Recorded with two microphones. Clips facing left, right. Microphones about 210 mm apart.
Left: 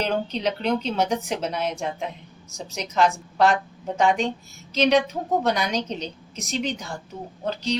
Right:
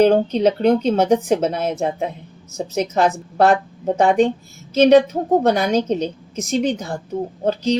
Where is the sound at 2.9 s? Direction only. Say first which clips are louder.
Left 1 dB; 50° right (ahead or behind).